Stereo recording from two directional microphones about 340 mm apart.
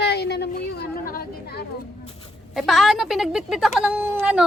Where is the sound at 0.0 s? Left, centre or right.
Left.